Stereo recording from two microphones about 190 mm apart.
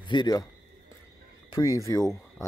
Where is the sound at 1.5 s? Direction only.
15° left (ahead or behind).